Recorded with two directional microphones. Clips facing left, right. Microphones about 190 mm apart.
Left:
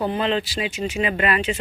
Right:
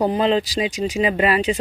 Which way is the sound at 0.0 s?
35° right (ahead or behind).